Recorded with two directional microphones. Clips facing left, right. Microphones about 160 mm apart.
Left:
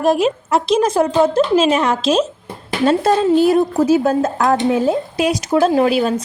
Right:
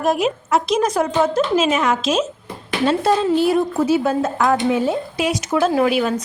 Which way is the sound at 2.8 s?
45° left (ahead or behind).